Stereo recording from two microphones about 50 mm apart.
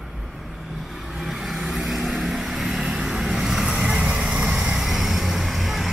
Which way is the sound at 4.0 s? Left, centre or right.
Right.